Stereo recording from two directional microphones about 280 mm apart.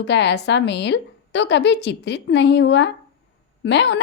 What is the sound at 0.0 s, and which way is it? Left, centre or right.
Speech, left.